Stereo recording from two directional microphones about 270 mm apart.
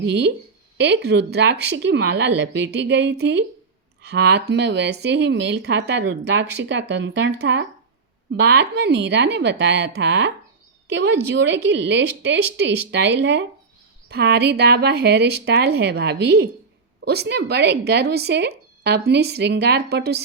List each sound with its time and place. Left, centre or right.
0.1 s speech: right